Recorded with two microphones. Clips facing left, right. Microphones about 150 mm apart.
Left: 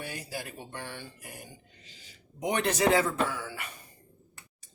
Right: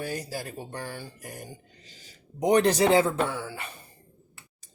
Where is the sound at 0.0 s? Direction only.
40° right (ahead or behind).